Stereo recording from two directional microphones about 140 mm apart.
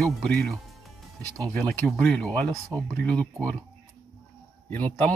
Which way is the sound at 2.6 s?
20° right (ahead or behind).